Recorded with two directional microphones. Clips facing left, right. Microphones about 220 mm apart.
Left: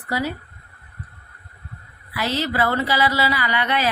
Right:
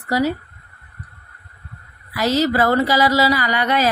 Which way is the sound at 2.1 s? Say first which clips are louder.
Right 6 dB; 40° right (ahead or behind).